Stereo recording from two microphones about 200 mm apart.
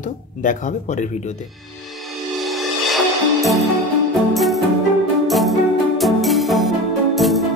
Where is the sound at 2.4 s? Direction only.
Centre (ahead or behind).